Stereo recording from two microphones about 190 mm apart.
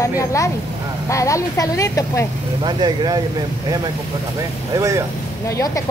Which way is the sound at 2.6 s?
20° right (ahead or behind).